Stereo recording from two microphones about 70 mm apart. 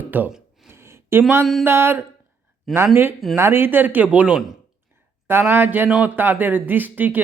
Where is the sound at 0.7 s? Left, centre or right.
Right.